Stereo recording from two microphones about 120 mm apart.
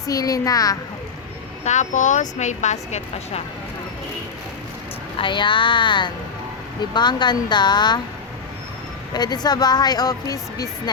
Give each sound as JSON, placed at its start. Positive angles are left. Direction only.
{"t": 0.0, "sound": "speech", "side_deg": 30}
{"t": 1.6, "sound": "speech", "side_deg": 85}
{"t": 5.2, "sound": "speech", "side_deg": 40}
{"t": 9.1, "sound": "speech", "side_deg": 35}